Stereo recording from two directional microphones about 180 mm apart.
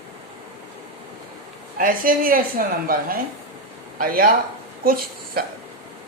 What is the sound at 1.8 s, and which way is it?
A woman's voice, 50° right (ahead or behind).